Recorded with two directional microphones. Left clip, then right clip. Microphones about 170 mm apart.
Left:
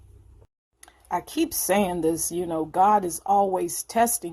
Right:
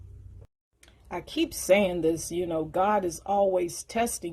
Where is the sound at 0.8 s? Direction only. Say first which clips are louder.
Left 8 dB; 35° left (ahead or behind).